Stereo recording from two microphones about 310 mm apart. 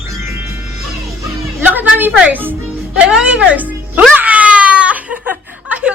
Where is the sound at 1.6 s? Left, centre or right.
Centre.